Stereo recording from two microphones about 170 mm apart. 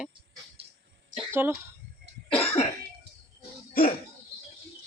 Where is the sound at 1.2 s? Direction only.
10° right (ahead or behind).